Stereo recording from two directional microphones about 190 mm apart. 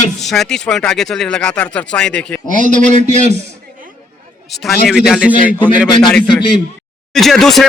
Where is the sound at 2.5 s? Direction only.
40° right (ahead or behind).